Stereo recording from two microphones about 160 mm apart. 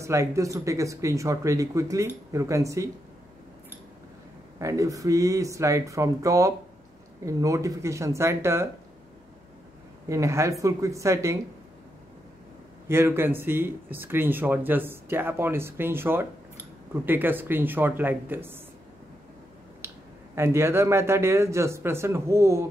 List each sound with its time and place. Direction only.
0.0 s speech: 20° right (ahead or behind)
4.6 s speech: 20° right (ahead or behind)
10.0 s speech: 20° right (ahead or behind)
12.8 s speech: 15° right (ahead or behind)
19.8 s finger snapping: 15° right (ahead or behind)
20.3 s speech: 15° right (ahead or behind)